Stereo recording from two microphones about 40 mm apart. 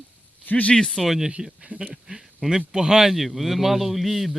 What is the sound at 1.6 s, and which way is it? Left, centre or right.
Speech, right.